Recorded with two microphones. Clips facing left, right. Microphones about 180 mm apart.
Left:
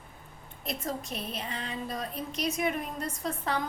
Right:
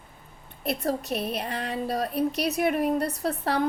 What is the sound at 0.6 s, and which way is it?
Speech, 65° right (ahead or behind).